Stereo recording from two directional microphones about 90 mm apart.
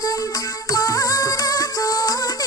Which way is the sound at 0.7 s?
40° left (ahead or behind).